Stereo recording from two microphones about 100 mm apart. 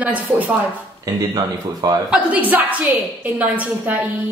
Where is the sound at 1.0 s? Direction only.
40° right (ahead or behind).